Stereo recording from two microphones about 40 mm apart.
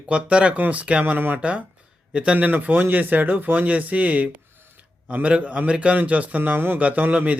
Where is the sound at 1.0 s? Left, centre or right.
Right.